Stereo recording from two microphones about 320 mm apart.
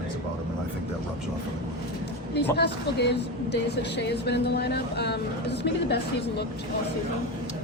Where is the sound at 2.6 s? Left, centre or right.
Left.